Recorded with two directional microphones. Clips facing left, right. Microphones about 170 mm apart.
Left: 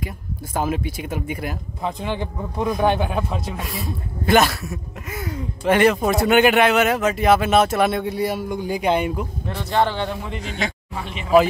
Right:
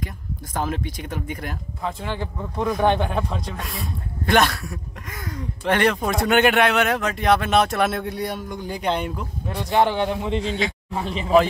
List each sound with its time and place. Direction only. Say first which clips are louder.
0.6 s speech: left 3 dB; 10° left (ahead or behind)
2.8 s a man's voice: even; 5° left (ahead or behind)
9.5 s a man's voice: right 1 dB; 15° right (ahead or behind); by 11.3 s 30° right (ahead or behind)